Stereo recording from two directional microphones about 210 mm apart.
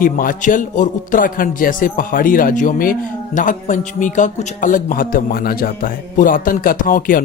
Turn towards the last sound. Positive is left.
turn(degrees=40)  # may be behind; listen again after turning